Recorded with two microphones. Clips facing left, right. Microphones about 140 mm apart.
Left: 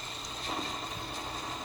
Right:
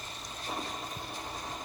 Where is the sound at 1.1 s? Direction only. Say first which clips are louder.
Left 1 dB; 15° right (ahead or behind).